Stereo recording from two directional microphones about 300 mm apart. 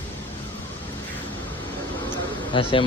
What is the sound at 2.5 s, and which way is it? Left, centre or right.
Speech, centre.